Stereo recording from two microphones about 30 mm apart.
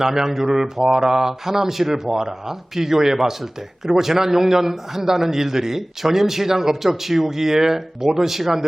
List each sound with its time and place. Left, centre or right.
0.0 s a man's voice: centre